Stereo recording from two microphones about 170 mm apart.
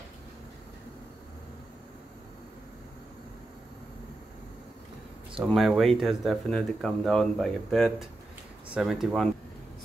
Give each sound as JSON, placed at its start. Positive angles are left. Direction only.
{"t": 5.4, "sound": "speech", "side_deg": 0}